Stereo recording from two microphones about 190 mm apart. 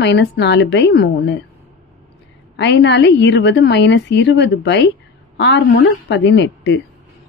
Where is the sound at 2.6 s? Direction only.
70° left (ahead or behind).